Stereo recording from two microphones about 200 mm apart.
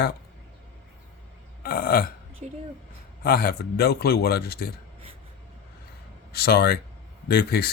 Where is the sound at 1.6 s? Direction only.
50° left (ahead or behind).